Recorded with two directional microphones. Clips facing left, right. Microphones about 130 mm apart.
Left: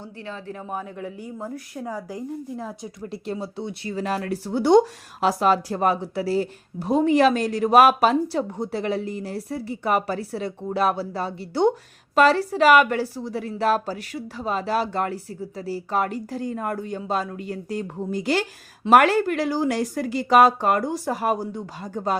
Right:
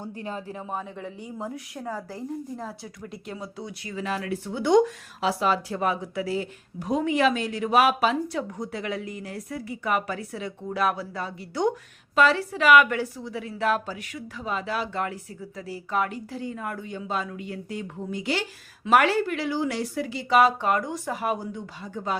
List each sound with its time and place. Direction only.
0.0 s speech: 15° right (ahead or behind)
0.7 s speech: 5° left (ahead or behind)
1.9 s a woman's voice: 15° left (ahead or behind)
3.0 s speech: 30° left (ahead or behind)
3.9 s speech: 40° left (ahead or behind)